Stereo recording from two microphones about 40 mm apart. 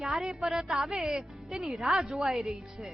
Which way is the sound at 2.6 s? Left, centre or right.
Centre.